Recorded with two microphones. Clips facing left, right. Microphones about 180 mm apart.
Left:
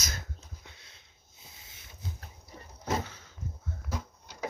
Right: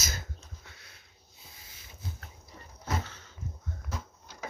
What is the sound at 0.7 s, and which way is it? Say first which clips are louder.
Sniff: right 1 dB; 25° left (ahead or behind).